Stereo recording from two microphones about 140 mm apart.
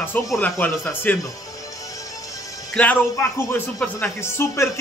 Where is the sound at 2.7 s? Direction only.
15° left (ahead or behind).